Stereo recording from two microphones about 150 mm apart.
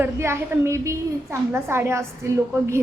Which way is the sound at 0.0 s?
15° right (ahead or behind).